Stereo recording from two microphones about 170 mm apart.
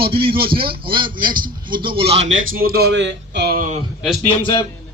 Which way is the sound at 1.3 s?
55° right (ahead or behind).